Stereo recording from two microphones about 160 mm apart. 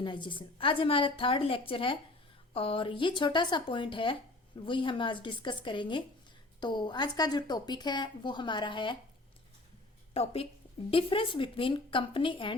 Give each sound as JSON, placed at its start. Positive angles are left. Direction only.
{"t": 0.0, "sound": "a woman's voice", "side_deg": 30}
{"t": 10.2, "sound": "speech", "side_deg": 40}